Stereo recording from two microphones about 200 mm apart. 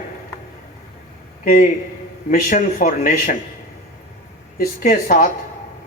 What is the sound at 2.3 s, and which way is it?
Speech, 40° left (ahead or behind).